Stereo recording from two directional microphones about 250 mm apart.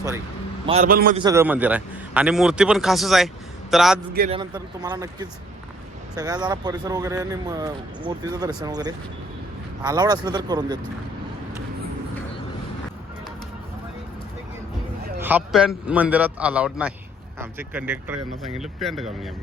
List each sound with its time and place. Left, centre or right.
0.7 s a man's voice: right
1.2 s a man's voice: centre
4.3 s speech: centre
15.2 s a man's voice: centre